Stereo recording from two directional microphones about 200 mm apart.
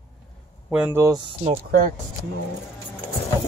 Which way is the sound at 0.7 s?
10° right (ahead or behind).